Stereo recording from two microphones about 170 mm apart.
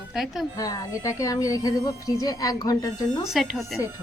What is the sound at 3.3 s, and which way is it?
Speech, centre (ahead or behind).